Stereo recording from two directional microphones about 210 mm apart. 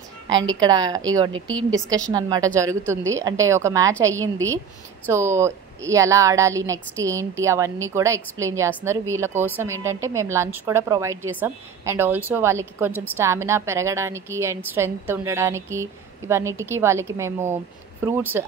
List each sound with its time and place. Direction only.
0.6 s a woman's voice: 20° right (ahead or behind)